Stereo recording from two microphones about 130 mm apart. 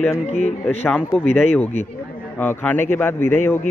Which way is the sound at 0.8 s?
Centre (ahead or behind).